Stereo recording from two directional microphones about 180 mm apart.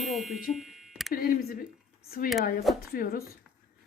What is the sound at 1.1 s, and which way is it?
A woman's voice, 55° left (ahead or behind).